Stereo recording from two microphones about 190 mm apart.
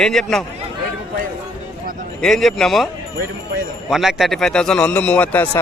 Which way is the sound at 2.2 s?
Centre (ahead or behind).